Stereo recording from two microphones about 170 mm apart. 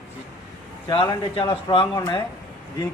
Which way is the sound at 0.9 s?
25° left (ahead or behind).